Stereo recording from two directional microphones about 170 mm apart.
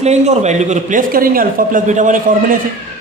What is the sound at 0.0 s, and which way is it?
Speech, 40° right (ahead or behind).